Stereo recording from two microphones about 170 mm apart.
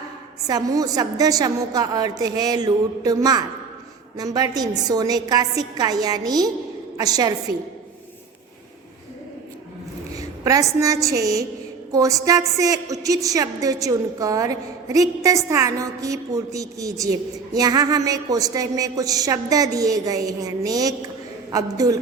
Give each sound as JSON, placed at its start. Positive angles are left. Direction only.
{"t": 0.4, "sound": "a woman's voice", "side_deg": -20}
{"t": 10.2, "sound": "a woman's voice", "side_deg": -20}